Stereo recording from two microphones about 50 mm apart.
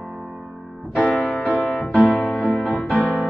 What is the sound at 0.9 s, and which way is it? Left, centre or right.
Music, left.